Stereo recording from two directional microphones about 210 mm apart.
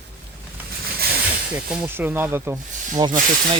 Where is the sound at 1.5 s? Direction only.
5° right (ahead or behind).